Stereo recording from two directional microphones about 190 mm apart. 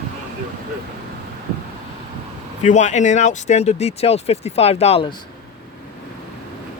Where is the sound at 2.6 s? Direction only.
40° left (ahead or behind).